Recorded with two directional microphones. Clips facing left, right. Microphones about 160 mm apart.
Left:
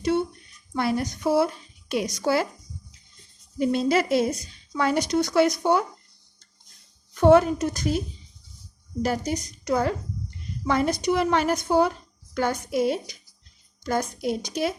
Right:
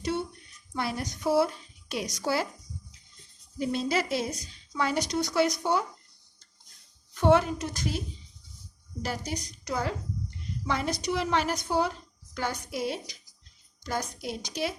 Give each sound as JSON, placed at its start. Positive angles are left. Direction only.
{"t": 0.7, "sound": "speech", "side_deg": 60}
{"t": 3.6, "sound": "speech", "side_deg": 60}
{"t": 7.1, "sound": "a woman's voice", "side_deg": 45}
{"t": 9.0, "sound": "a woman's voice", "side_deg": 45}